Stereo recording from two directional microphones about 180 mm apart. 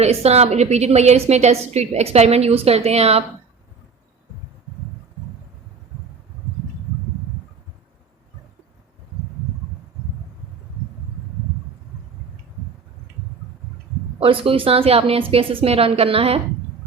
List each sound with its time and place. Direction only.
0.0 s a woman's voice: 35° right (ahead or behind)
14.2 s a woman's voice: 30° right (ahead or behind)